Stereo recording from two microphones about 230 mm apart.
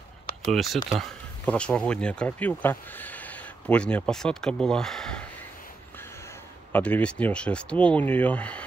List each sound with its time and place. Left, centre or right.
0.5 s speech: centre
6.7 s speech: centre